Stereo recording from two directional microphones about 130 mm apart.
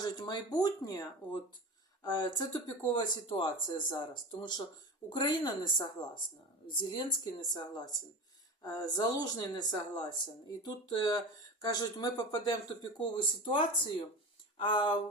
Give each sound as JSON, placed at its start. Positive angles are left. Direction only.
{"t": 0.0, "sound": "speech", "side_deg": 35}
{"t": 14.6, "sound": "speech", "side_deg": 35}